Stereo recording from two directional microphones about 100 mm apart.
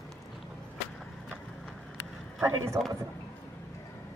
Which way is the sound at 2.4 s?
30° right (ahead or behind).